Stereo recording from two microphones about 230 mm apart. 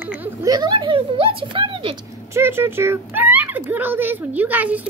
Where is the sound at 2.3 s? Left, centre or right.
Centre.